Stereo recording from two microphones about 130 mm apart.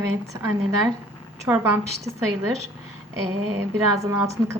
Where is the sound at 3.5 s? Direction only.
25° right (ahead or behind).